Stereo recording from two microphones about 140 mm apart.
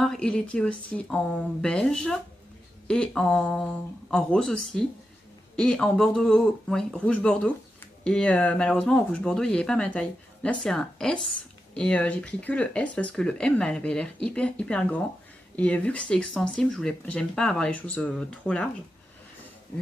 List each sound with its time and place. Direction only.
0.0 s speech: 5° left (ahead or behind)